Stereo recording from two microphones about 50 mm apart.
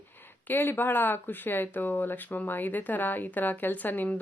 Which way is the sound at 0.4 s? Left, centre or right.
Left.